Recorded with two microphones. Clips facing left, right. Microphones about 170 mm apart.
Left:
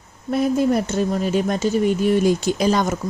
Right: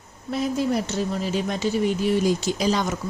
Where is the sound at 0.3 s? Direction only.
55° left (ahead or behind).